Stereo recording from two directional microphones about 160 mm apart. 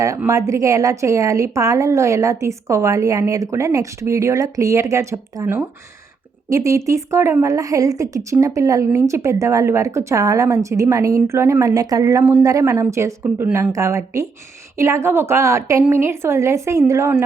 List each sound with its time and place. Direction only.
0.3 s a woman's voice: 20° right (ahead or behind)